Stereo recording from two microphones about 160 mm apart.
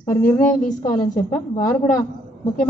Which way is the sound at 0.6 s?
50° left (ahead or behind).